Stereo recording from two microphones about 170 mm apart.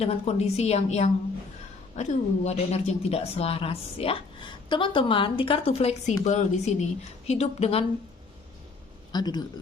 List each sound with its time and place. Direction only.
0.0 s a woman's voice: 40° left (ahead or behind)
9.1 s speech: 25° left (ahead or behind)